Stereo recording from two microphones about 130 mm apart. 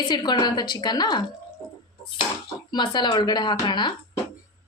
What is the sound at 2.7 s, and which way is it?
A woman's voice, 35° left (ahead or behind).